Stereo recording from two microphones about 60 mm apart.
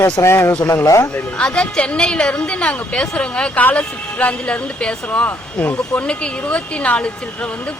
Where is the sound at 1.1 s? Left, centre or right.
Left.